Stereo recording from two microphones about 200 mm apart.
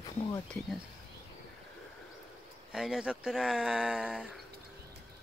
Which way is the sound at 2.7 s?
5° right (ahead or behind).